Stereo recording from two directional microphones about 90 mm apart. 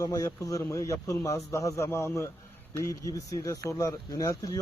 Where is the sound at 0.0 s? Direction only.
40° left (ahead or behind).